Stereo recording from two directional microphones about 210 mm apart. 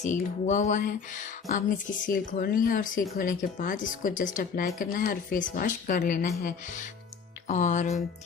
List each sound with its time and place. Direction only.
0.0 s speech: 35° left (ahead or behind)